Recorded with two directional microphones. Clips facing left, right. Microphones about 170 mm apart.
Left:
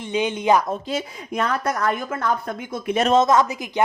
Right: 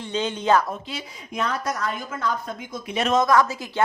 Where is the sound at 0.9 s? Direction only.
50° left (ahead or behind).